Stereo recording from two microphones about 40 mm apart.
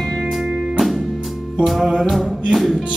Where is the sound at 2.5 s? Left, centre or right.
Centre.